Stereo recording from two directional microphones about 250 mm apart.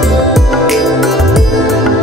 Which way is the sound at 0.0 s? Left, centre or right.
Centre.